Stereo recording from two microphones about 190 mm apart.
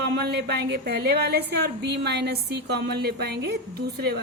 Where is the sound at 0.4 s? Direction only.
60° right (ahead or behind).